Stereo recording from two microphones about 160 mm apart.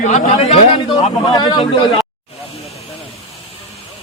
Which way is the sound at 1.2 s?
25° left (ahead or behind).